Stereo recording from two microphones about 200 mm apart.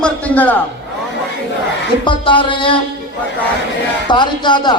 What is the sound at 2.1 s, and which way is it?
Speech, 25° left (ahead or behind).